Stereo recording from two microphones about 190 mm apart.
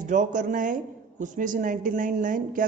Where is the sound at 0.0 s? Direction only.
40° right (ahead or behind).